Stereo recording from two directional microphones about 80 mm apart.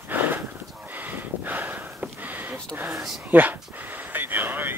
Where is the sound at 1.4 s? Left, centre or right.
Right.